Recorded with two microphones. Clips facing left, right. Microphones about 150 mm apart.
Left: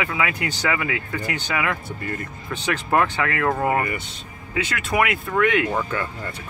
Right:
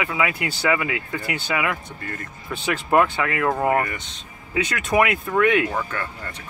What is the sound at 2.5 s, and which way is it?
Speech, 15° right (ahead or behind).